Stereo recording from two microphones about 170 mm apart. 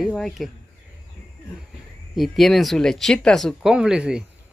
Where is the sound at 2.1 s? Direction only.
Centre (ahead or behind).